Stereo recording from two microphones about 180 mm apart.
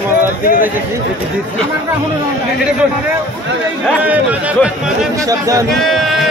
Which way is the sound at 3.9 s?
5° right (ahead or behind).